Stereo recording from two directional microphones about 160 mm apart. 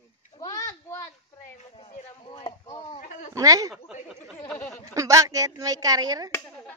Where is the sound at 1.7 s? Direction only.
35° left (ahead or behind).